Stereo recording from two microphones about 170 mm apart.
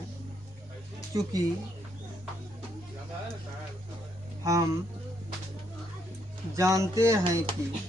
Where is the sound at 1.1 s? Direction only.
20° right (ahead or behind).